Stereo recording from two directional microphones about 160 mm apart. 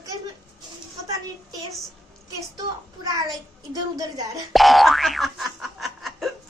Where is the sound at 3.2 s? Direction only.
20° right (ahead or behind).